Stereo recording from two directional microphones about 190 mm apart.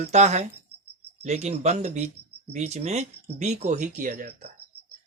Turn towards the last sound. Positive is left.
turn(degrees=-55)  # may be behind; listen again after turning